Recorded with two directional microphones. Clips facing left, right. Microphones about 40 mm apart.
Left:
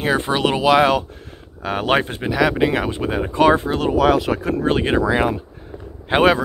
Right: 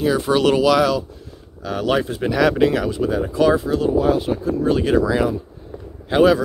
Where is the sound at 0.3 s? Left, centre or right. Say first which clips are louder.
Right 1 dB; left.